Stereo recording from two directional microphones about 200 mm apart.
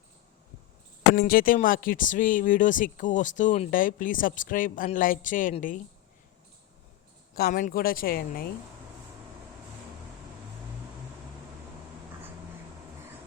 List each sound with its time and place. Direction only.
1.1 s speech: 50° left (ahead or behind)
7.3 s speech: 45° left (ahead or behind)